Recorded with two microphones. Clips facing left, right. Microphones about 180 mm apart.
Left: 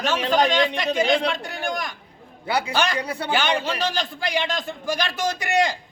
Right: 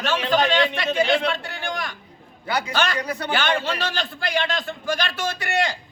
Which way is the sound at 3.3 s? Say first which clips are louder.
Left 1 dB; 15° left (ahead or behind).